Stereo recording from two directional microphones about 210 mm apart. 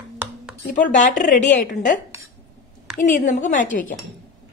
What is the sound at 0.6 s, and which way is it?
A woman's voice, 35° left (ahead or behind).